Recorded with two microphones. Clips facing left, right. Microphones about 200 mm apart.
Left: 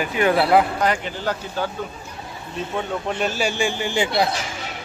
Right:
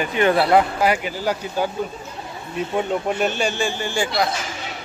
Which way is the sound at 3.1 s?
Centre (ahead or behind).